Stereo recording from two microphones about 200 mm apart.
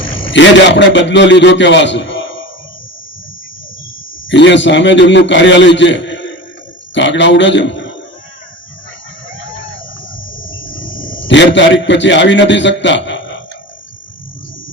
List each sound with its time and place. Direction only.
0.3 s a man's voice: 65° left (ahead or behind)
4.3 s a man's voice: 65° left (ahead or behind)
10.3 s cricket: 75° left (ahead or behind)
10.7 s a sound: 75° left (ahead or behind)
10.9 s a sound: 45° left (ahead or behind)
11.2 s a man's voice: 65° left (ahead or behind)